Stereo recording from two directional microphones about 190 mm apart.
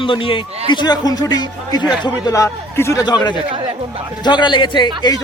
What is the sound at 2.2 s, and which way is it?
A man's voice, 15° left (ahead or behind).